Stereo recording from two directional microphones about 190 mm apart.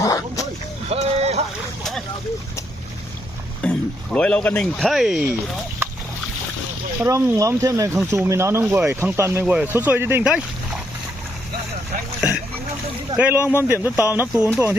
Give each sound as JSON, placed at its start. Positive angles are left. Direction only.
{"t": 0.0, "sound": "a sound", "side_deg": 15}
{"t": 0.9, "sound": "boat", "side_deg": -35}
{"t": 1.8, "sound": "splash", "side_deg": 0}
{"t": 3.6, "sound": "speech", "side_deg": 5}
{"t": 7.0, "sound": "speech", "side_deg": -15}
{"t": 13.1, "sound": "speech", "side_deg": -10}